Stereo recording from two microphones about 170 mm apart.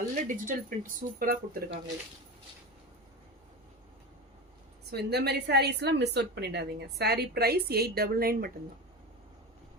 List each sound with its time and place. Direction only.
0.3 s speech: 50° right (ahead or behind)
4.9 s a woman's voice: 70° right (ahead or behind)